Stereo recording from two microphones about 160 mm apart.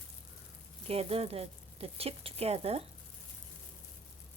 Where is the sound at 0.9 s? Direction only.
40° right (ahead or behind).